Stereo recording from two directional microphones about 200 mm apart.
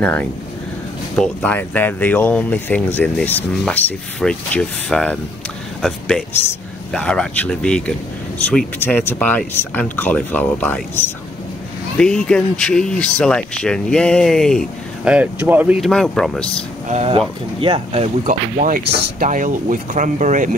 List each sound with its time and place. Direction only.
0.0 s speech: 10° left (ahead or behind)
16.9 s speech: 30° right (ahead or behind)